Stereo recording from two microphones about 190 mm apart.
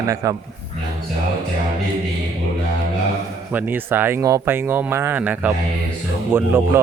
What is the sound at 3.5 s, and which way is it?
Speech, 10° right (ahead or behind).